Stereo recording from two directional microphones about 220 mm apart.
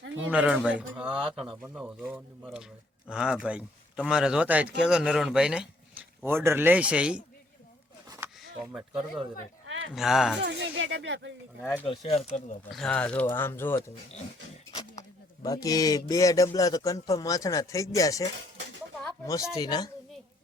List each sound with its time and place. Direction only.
0.3 s speech: 5° right (ahead or behind)
8.7 s speech: centre (ahead or behind)
9.6 s a sound: 60° right (ahead or behind)
9.9 s speech: centre (ahead or behind)
10.4 s speech: 55° right (ahead or behind)
11.9 s speech: 25° left (ahead or behind)
12.7 s a man's voice: 5° left (ahead or behind)
14.7 s a sound: 25° left (ahead or behind)
15.4 s a man's voice: 15° left (ahead or behind)